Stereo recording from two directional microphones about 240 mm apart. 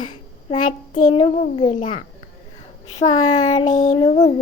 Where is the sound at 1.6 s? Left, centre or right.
Left.